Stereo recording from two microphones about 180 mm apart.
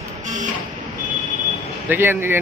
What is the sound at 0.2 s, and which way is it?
Vehicle, 45° right (ahead or behind).